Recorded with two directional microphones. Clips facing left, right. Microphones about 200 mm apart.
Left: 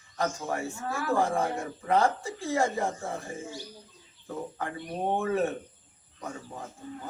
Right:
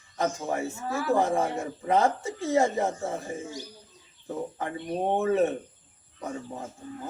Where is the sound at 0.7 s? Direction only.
20° right (ahead or behind).